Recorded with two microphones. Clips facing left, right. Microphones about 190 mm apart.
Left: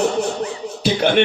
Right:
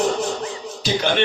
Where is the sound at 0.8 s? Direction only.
55° left (ahead or behind).